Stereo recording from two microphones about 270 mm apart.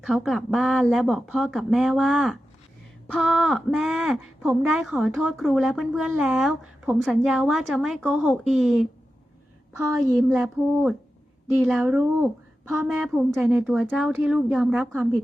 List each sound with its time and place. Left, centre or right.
0.0 s a woman's voice: centre